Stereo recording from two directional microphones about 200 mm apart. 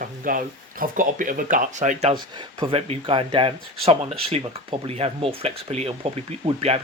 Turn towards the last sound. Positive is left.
turn(degrees=-30)  # may be behind; listen again after turning